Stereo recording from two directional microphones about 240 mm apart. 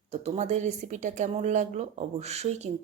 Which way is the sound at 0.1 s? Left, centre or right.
Right.